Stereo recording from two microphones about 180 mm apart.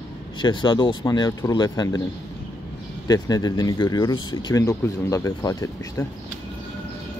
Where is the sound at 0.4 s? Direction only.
25° left (ahead or behind).